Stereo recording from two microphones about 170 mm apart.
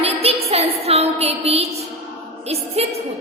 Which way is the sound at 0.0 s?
35° right (ahead or behind).